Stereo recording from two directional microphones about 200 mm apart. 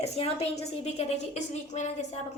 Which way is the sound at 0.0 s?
30° left (ahead or behind).